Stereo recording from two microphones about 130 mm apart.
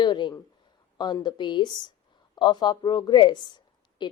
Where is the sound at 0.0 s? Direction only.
35° left (ahead or behind).